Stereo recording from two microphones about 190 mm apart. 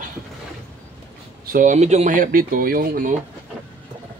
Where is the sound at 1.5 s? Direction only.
40° right (ahead or behind).